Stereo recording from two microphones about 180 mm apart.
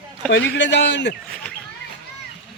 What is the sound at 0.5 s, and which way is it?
Speech, 80° left.